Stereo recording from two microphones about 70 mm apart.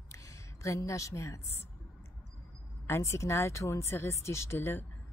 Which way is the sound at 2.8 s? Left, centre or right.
Left.